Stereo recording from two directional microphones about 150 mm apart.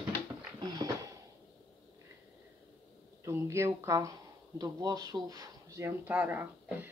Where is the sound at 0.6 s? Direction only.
25° right (ahead or behind).